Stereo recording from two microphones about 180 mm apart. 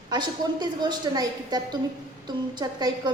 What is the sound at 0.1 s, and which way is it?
A woman's voice, 25° right (ahead or behind).